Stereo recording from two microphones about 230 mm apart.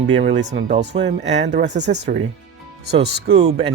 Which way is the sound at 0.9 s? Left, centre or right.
Right.